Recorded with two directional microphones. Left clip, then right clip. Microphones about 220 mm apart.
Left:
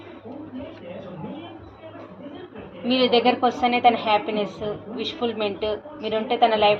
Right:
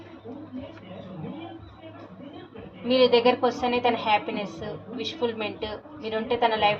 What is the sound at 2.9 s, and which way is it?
A woman's voice, 30° left (ahead or behind).